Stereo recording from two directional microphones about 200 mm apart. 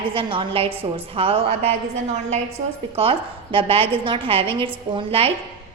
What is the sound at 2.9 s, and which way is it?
A woman's voice, 30° right (ahead or behind).